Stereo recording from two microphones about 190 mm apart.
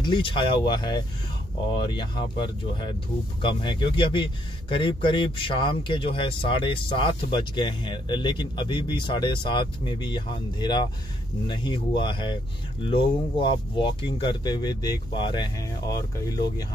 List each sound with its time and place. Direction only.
0.0 s a man's voice: 25° left (ahead or behind)
3.4 s a man's voice: 25° left (ahead or behind)